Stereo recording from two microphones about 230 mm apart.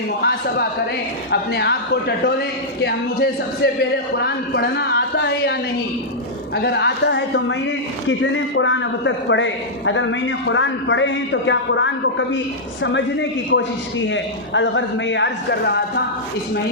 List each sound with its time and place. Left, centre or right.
0.2 s a man's voice: left